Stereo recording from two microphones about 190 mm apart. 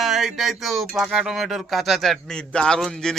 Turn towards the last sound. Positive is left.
turn(degrees=0)  # may be behind; listen again after turning